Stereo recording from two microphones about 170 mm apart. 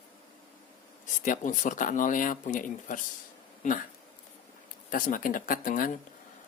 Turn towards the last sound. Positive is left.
turn(degrees=55)  # may be behind; listen again after turning